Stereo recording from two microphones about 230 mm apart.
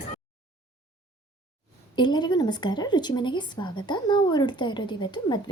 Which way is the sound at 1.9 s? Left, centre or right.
Centre.